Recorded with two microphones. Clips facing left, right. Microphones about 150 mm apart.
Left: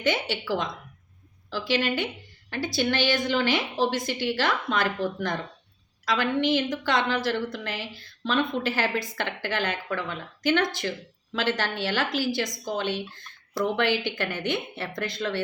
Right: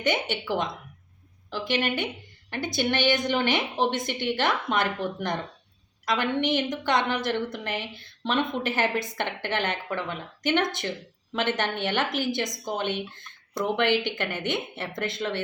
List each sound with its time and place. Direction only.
0.0 s speech: 20° right (ahead or behind)
1.7 s speech: 20° right (ahead or behind)